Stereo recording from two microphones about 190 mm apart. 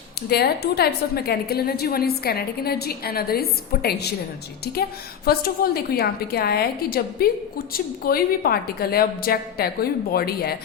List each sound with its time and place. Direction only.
0.3 s a woman's voice: 55° left (ahead or behind)